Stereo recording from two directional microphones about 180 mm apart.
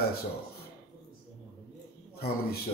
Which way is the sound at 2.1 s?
60° left (ahead or behind).